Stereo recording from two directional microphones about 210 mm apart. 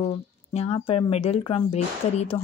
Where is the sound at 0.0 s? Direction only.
30° left (ahead or behind).